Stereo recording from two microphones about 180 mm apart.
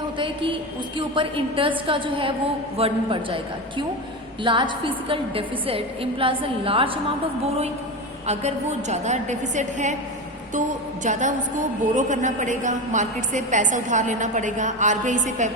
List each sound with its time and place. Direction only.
0.2 s a woman's voice: 30° right (ahead or behind)
8.3 s a woman's voice: 40° right (ahead or behind)